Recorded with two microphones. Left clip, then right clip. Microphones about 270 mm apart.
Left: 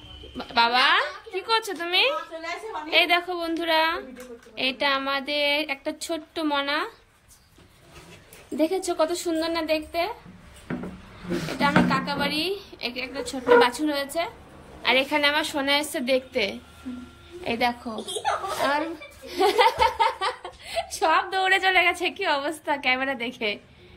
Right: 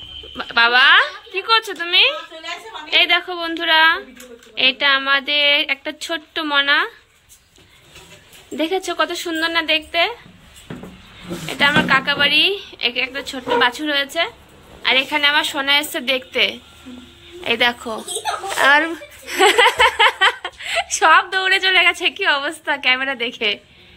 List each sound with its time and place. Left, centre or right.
0.4 s a woman's voice: centre
8.5 s a woman's voice: centre
11.5 s a woman's voice: centre
17.9 s speech: centre
19.2 s speech: right
20.2 s a woman's voice: centre